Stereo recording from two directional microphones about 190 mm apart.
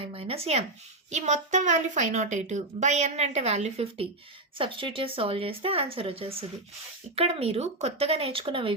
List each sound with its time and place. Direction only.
0.0 s a woman's voice: 30° right (ahead or behind)